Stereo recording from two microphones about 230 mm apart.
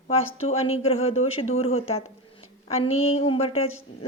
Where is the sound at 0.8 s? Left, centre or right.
Left.